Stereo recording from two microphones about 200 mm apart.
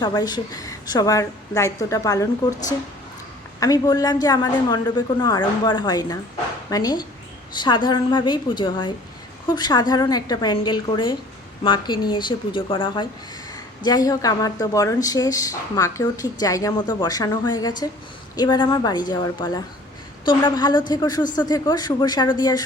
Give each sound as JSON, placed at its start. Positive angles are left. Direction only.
{"t": 0.0, "sound": "a woman's voice", "side_deg": 20}